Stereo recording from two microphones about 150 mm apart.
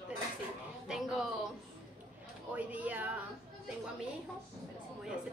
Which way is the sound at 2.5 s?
10° right (ahead or behind).